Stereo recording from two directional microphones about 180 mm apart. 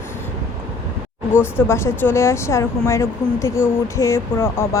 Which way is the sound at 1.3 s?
15° left (ahead or behind).